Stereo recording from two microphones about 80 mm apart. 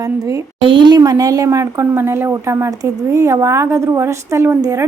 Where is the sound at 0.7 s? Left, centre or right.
Right.